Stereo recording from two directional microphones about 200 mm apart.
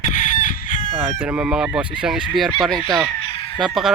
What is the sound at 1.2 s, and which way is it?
Speech, 5° right (ahead or behind).